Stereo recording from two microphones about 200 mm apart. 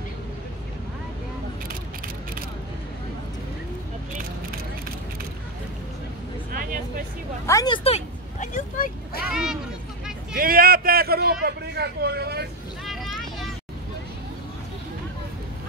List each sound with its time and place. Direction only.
6.5 s vehicle: 45° right (ahead or behind)
7.4 s vehicle: 20° left (ahead or behind); by 9.2 s 45° left (ahead or behind)
9.3 s a sound: 5° right (ahead or behind)
10.3 s a sound: 45° right (ahead or behind)
11.4 s vehicle: 55° right (ahead or behind)
12.8 s vehicle: centre (ahead or behind)